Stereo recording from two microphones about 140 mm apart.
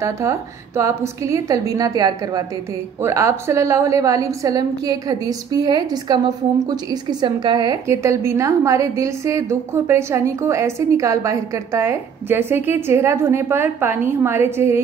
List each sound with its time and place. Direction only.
0.0 s a woman's voice: 20° right (ahead or behind)
7.8 s a woman's voice: 20° right (ahead or behind)